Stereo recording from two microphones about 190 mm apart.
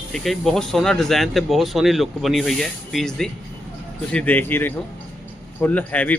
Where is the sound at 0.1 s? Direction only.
Centre (ahead or behind).